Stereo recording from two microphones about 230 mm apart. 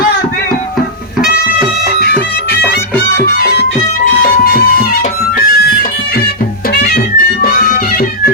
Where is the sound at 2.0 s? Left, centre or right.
Left.